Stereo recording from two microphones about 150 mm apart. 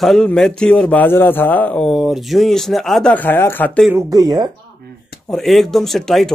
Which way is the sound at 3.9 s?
20° right (ahead or behind).